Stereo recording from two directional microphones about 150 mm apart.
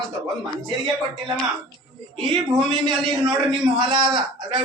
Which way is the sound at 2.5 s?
35° right (ahead or behind).